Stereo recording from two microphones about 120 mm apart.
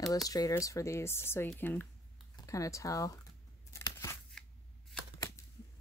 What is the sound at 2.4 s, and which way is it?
Speech, 25° left (ahead or behind).